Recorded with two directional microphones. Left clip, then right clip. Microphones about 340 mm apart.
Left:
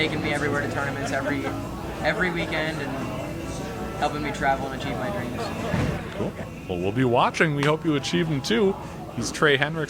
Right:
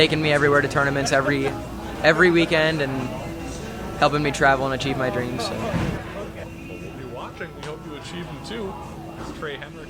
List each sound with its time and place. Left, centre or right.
0.0 s speech: right
4.0 s speech: right
7.2 s speech: left
8.1 s speech: left
9.4 s speech: left